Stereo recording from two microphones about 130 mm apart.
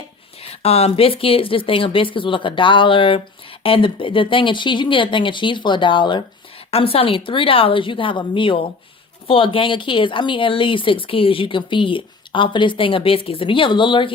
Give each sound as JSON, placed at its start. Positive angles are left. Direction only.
{"t": 0.4, "sound": "speech", "side_deg": 50}
{"t": 6.7, "sound": "speech", "side_deg": 50}